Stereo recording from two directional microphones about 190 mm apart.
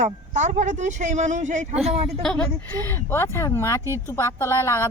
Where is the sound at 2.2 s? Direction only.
5° left (ahead or behind).